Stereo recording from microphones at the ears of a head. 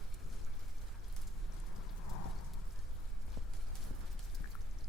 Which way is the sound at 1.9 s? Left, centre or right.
Left.